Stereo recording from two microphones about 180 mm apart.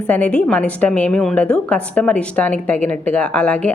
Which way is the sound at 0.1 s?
5° left (ahead or behind).